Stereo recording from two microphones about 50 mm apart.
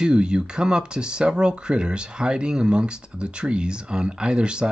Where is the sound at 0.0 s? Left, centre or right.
Centre.